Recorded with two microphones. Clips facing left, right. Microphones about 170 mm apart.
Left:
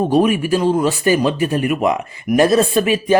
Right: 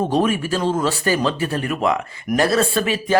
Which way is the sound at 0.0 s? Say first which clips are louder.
Left 4 dB; 15° left (ahead or behind).